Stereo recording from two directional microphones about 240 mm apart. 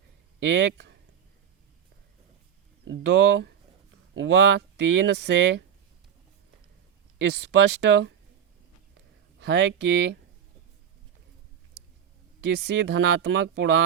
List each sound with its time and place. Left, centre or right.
0.4 s speech: right
2.8 s speech: right
7.2 s speech: right
9.4 s speech: right
12.5 s speech: right